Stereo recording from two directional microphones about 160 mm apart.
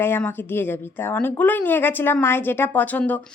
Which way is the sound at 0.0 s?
15° left (ahead or behind).